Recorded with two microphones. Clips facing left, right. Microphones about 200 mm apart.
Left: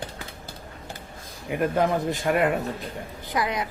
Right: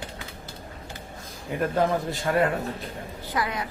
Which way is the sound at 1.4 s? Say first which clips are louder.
Left 1 dB; 15° left (ahead or behind).